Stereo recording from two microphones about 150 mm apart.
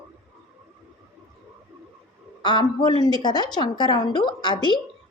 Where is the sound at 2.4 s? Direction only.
30° left (ahead or behind).